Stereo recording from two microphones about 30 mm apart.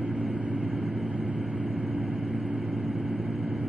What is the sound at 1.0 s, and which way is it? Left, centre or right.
Vehicle, right.